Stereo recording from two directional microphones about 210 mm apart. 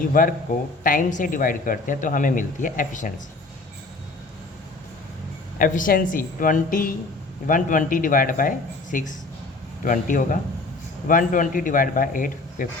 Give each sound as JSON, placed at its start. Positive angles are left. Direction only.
{"t": 0.1, "sound": "speech", "side_deg": 40}
{"t": 5.5, "sound": "speech", "side_deg": 40}